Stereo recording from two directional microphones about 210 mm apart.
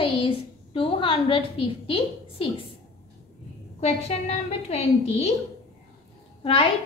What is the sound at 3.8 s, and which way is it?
A woman's voice, 30° left (ahead or behind).